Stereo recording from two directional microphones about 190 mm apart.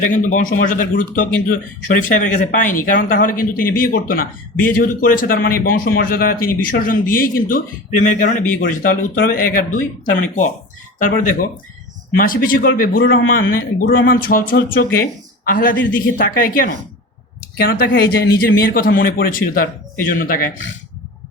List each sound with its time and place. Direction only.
0.0 s a man's voice: 45° left (ahead or behind)
12.1 s a man's voice: 45° left (ahead or behind)